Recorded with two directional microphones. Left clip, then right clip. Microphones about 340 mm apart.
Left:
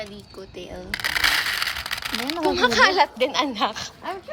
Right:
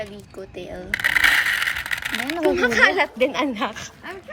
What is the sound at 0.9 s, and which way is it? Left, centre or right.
Speech, centre.